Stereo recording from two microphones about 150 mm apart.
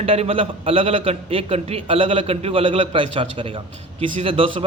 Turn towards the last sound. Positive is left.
turn(degrees=-35)  # may be behind; listen again after turning